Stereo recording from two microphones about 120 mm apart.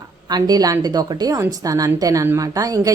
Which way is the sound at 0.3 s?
35° right (ahead or behind).